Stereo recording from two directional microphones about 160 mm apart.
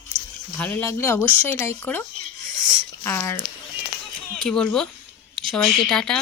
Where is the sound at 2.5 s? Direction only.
15° left (ahead or behind).